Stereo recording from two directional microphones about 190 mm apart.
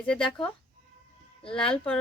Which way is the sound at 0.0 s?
5° left (ahead or behind).